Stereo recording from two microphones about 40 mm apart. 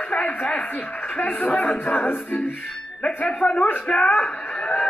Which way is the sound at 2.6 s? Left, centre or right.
Centre.